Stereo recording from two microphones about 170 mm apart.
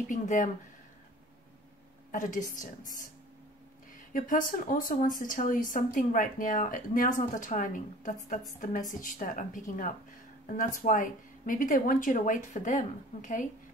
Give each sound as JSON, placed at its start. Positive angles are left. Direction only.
{"t": 0.1, "sound": "speech", "side_deg": 50}
{"t": 2.1, "sound": "speech", "side_deg": 50}
{"t": 4.1, "sound": "speech", "side_deg": 50}